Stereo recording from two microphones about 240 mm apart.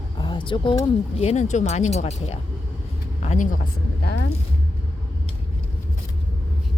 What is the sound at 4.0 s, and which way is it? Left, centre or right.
Speech, left.